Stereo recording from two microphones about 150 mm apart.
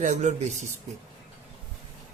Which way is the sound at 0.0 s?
50° right (ahead or behind).